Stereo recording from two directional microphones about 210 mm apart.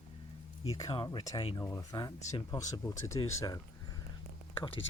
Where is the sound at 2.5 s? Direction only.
15° left (ahead or behind).